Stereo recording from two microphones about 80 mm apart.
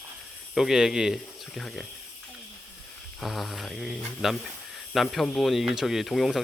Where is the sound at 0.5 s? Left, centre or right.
Centre.